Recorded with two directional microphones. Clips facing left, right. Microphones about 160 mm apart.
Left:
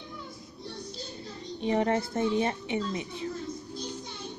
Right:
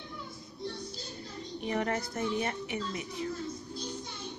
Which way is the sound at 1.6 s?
25° left (ahead or behind).